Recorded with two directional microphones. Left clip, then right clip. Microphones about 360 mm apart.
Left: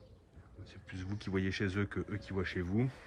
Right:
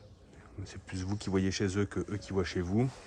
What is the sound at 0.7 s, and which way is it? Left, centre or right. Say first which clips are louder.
Speech: right 6 dB; centre.